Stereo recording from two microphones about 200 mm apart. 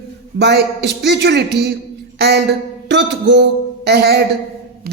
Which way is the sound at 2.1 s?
55° right (ahead or behind).